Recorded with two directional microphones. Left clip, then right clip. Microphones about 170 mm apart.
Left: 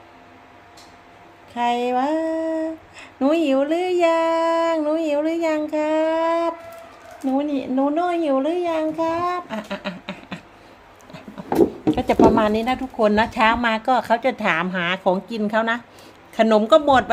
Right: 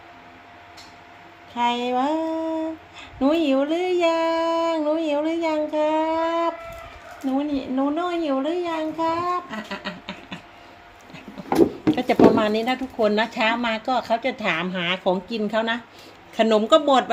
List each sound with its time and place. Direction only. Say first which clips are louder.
1.5 s speech: left 2 dB; 10° left (ahead or behind)
7.3 s speech: left 3 dB; 25° left (ahead or behind)
11.5 s speech: left 1 dB; centre (ahead or behind)